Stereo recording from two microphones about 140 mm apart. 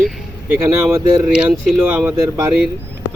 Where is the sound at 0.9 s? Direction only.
5° right (ahead or behind).